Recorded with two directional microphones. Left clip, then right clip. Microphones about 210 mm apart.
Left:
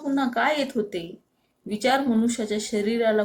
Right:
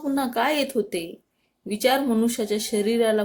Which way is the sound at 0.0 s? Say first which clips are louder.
Even; 45° right (ahead or behind).